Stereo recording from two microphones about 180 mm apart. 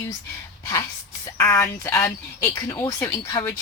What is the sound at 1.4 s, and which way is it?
Speech, 20° left (ahead or behind).